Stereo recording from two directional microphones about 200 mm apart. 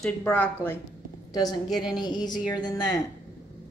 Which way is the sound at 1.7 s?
Centre (ahead or behind).